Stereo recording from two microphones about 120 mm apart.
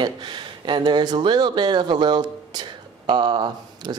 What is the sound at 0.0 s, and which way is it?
Speech, 40° right (ahead or behind).